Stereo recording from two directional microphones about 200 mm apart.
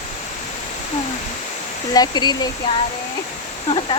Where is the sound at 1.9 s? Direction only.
20° left (ahead or behind).